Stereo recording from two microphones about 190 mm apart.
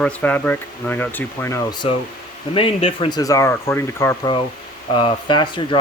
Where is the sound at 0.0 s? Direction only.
10° left (ahead or behind).